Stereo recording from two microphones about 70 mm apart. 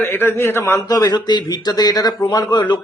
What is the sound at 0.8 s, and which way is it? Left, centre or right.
Speech, left.